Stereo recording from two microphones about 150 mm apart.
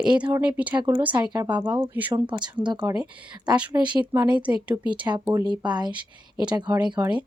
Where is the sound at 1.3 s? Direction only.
30° right (ahead or behind).